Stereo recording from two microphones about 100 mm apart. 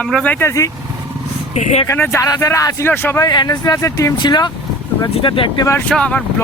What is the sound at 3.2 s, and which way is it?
Speech, 45° left (ahead or behind).